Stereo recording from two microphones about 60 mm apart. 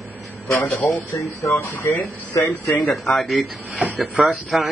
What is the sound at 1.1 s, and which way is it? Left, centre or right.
Speech, left.